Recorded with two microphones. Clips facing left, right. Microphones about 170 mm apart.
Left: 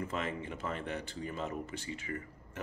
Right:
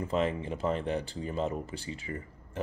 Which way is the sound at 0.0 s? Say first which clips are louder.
Right 7 dB; 35° right (ahead or behind).